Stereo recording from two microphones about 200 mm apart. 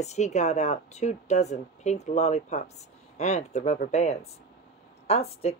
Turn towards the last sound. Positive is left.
turn(degrees=30)  # may be behind; listen again after turning